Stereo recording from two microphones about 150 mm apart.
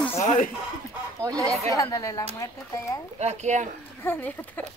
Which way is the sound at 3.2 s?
50° right (ahead or behind).